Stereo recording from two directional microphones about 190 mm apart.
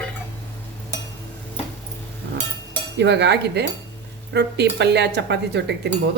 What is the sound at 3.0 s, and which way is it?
Speech, 65° right (ahead or behind).